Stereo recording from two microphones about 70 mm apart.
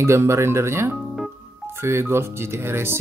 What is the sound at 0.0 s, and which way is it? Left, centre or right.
Speech, right.